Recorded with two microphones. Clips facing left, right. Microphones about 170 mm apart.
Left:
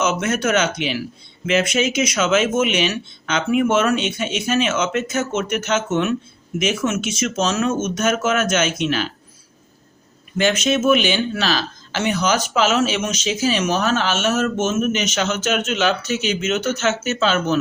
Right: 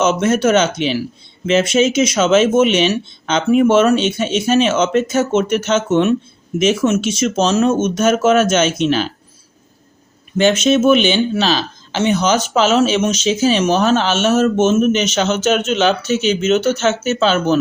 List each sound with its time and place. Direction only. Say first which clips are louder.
0.0 s speech: right 6 dB; 30° right (ahead or behind)
10.3 s speech: right 6 dB; 25° right (ahead or behind)